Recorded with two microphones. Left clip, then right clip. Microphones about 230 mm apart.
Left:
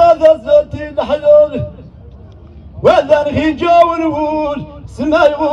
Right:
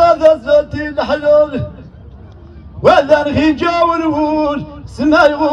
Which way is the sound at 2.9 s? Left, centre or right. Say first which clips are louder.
Right 1 dB; right.